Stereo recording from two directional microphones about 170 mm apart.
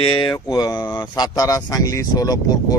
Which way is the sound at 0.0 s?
30° left (ahead or behind).